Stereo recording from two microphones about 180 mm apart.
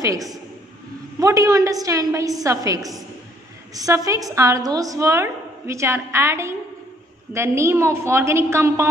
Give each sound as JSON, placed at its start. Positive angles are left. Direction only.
{"t": 1.2, "sound": "a woman's voice", "side_deg": -20}